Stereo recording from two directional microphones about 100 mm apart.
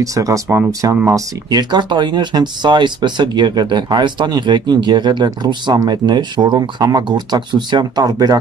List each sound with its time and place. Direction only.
0.0 s speech: 35° right (ahead or behind)
1.5 s speech: 50° right (ahead or behind)